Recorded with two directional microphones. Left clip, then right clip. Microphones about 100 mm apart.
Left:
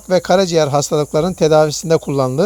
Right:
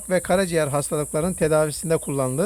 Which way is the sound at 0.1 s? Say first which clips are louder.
Left 8 dB; 40° left (ahead or behind).